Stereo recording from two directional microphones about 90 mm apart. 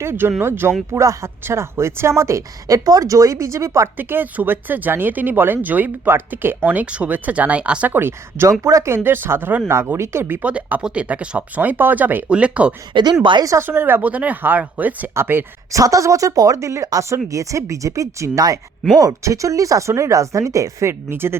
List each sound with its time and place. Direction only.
0.0 s speech: 25° right (ahead or behind)
3.9 s speech: 20° right (ahead or behind)
8.6 s speech: 35° right (ahead or behind)
9.0 s speech: 25° right (ahead or behind)
10.4 s speech: 15° right (ahead or behind)
12.9 s speech: 55° right (ahead or behind)
13.4 s speech: 35° right (ahead or behind)
13.7 s speech: 25° right (ahead or behind)
15.7 s speech: 40° right (ahead or behind)